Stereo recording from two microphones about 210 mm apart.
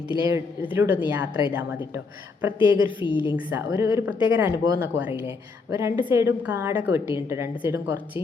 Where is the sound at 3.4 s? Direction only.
10° right (ahead or behind).